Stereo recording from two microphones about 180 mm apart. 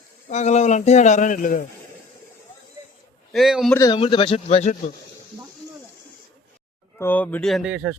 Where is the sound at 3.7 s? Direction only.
20° left (ahead or behind).